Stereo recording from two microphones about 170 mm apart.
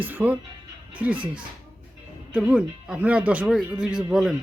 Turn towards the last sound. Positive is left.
turn(degrees=0)  # may be behind; listen again after turning